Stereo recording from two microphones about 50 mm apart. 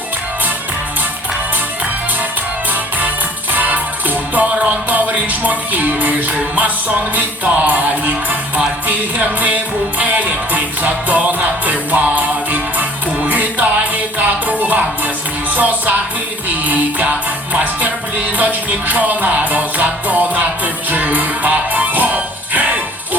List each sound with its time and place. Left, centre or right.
3.5 s music: right